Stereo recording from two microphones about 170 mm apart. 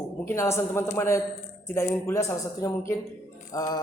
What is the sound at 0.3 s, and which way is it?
Speech, 15° left (ahead or behind).